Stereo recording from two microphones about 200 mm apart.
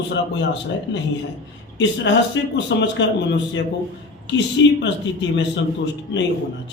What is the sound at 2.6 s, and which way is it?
Speech, 60° left (ahead or behind).